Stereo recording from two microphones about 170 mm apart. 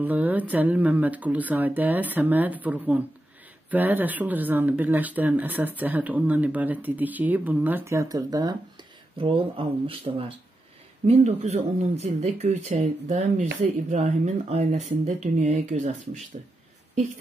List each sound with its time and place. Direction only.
0.0 s speech: 10° right (ahead or behind)
9.2 s speech: 30° right (ahead or behind)